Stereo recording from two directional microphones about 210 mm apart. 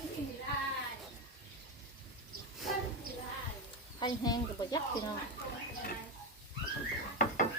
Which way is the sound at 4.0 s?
20° left (ahead or behind).